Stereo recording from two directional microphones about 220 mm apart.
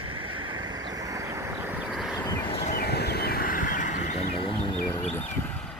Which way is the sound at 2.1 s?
20° left (ahead or behind).